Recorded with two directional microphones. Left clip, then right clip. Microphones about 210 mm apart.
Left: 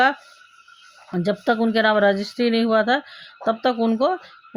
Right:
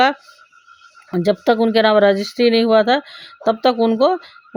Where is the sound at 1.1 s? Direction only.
35° right (ahead or behind).